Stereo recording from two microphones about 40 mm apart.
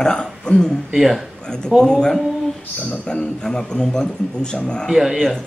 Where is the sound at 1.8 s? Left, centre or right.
Centre.